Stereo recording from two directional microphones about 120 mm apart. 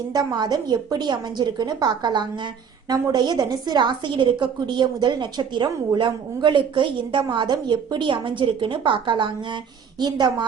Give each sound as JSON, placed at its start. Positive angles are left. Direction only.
{"t": 0.1, "sound": "a woman's voice", "side_deg": -35}